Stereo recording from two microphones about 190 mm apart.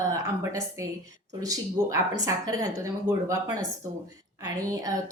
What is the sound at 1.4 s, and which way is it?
Speech, 20° right (ahead or behind).